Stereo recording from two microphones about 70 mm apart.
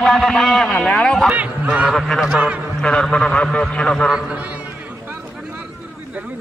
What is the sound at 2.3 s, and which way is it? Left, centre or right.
Speech, centre.